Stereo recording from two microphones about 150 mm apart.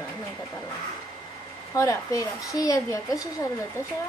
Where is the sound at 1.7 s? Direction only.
20° left (ahead or behind).